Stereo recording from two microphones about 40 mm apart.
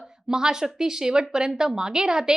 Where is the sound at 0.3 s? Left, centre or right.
Centre.